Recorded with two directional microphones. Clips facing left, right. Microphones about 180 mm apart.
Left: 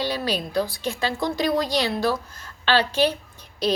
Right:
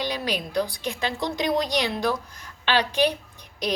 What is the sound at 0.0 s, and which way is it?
A woman's voice, 15° right (ahead or behind).